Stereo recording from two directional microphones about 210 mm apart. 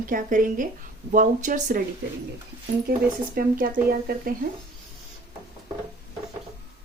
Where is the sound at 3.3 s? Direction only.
45° right (ahead or behind).